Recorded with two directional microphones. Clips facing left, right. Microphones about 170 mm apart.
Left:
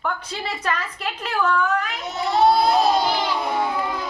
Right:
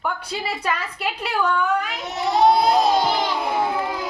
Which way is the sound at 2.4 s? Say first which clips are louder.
Right 1 dB; 20° right (ahead or behind).